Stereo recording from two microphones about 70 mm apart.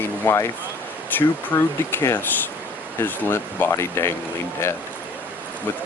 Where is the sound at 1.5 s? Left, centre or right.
Left.